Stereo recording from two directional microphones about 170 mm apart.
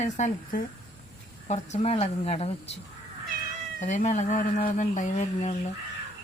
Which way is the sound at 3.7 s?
45° left (ahead or behind).